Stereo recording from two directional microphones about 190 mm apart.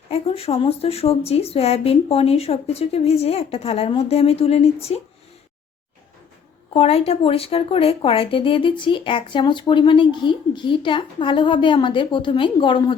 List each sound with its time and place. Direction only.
0.1 s speech: 30° left (ahead or behind)
6.7 s speech: 30° left (ahead or behind)